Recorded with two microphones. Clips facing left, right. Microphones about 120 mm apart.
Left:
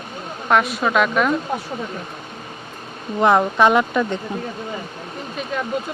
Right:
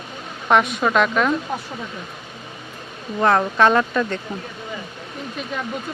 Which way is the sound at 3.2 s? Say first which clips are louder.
Left 1 dB; 15° left (ahead or behind).